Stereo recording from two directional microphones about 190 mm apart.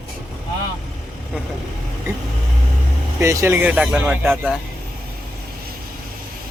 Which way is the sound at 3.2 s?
15° right (ahead or behind).